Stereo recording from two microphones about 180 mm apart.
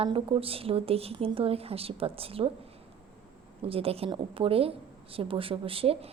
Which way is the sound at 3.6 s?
30° right (ahead or behind).